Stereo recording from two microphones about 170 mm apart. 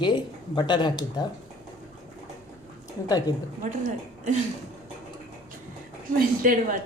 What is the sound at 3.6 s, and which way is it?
Speech, 45° right (ahead or behind).